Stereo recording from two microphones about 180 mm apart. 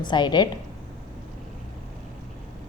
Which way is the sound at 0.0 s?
25° left (ahead or behind).